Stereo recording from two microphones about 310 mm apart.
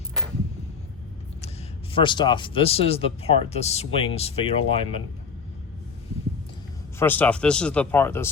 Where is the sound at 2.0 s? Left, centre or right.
Centre.